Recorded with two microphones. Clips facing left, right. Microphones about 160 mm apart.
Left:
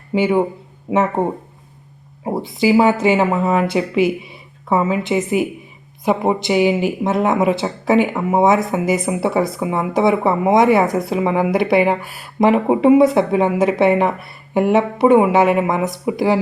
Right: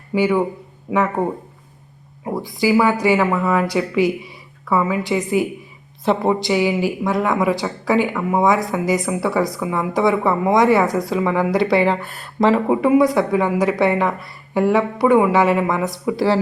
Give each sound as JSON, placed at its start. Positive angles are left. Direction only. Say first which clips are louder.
{"t": 0.1, "sound": "speech", "louder": "left 1 dB", "side_deg": 20}